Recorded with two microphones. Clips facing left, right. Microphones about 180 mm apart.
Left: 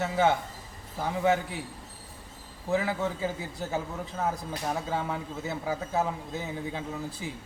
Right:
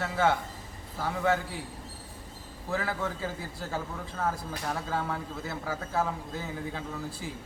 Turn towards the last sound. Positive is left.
turn(degrees=20)  # may be behind; listen again after turning